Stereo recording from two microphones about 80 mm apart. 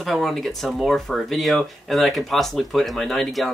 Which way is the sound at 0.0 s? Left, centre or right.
Centre.